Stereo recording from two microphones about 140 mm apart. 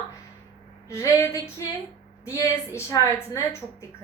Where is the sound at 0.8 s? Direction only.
20° left (ahead or behind).